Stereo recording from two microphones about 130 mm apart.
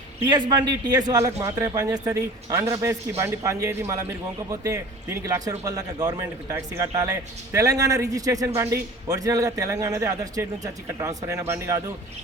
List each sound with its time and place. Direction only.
0.3 s speech: 35° right (ahead or behind); by 11.8 s 20° right (ahead or behind)